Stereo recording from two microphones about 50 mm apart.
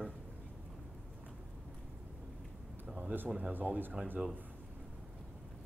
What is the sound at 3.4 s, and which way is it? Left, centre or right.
Speech, right.